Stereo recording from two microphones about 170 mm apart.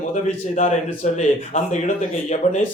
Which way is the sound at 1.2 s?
45° left (ahead or behind).